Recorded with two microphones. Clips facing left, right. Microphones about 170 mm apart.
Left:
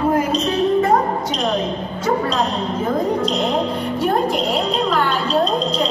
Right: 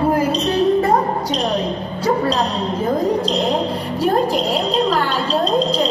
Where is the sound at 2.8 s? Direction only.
30° right (ahead or behind).